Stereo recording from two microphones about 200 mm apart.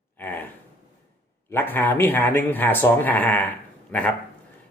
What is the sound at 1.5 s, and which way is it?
Speech, 10° left (ahead or behind).